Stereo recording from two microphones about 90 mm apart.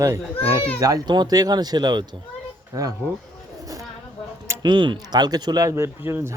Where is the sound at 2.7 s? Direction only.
40° right (ahead or behind).